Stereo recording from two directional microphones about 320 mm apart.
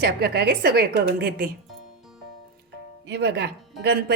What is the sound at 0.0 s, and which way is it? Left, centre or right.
A woman's voice, right.